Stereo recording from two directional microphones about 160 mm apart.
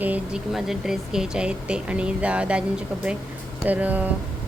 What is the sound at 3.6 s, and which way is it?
Speech, 10° right (ahead or behind).